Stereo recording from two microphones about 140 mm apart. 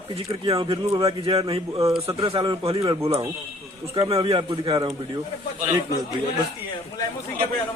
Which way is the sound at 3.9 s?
40° right (ahead or behind).